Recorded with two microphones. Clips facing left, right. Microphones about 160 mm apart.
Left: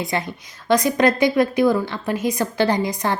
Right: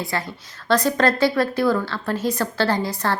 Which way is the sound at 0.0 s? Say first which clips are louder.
Left 2 dB; 20° left (ahead or behind).